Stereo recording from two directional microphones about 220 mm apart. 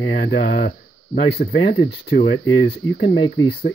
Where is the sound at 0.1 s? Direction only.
40° left (ahead or behind).